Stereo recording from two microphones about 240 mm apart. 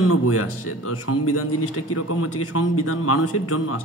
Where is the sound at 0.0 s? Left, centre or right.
Left.